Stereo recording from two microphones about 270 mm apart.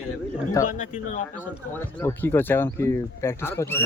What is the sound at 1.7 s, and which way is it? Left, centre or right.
Speech, centre.